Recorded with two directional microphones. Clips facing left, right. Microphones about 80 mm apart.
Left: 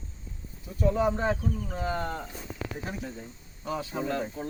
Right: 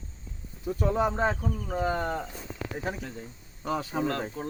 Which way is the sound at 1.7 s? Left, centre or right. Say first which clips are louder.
Right 6 dB; right.